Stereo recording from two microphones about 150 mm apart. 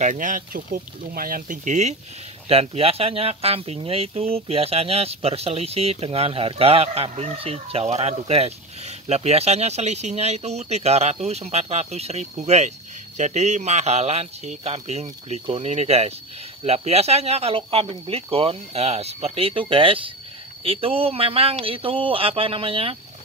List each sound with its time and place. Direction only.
0.0 s speech: 60° right (ahead or behind); by 22.9 s 40° right (ahead or behind)